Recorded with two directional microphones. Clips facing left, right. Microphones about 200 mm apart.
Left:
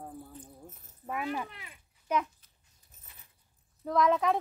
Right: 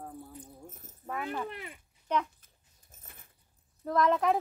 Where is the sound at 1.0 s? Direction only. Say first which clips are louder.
Left 1 dB; 10° left (ahead or behind).